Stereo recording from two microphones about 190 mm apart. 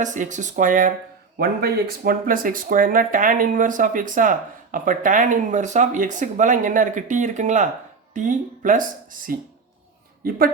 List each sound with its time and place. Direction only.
0.0 s speech: 40° right (ahead or behind)